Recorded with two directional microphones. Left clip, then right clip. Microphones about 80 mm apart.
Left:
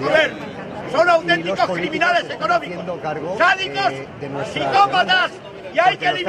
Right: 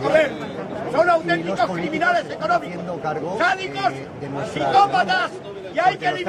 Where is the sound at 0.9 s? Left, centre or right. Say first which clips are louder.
Left 3 dB; centre.